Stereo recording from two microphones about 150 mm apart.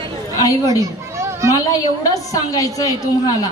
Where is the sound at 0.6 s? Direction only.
20° right (ahead or behind).